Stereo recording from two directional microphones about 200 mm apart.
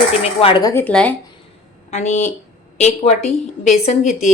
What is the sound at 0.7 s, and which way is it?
Speech, 10° left (ahead or behind).